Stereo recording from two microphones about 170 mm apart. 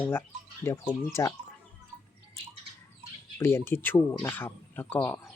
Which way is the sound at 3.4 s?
15° left (ahead or behind).